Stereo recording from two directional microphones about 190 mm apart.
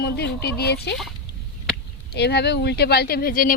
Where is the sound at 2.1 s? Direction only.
60° left (ahead or behind).